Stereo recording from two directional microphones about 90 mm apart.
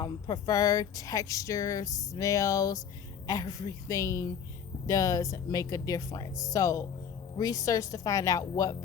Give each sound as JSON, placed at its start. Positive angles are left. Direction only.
{"t": 0.0, "sound": "speech", "side_deg": 40}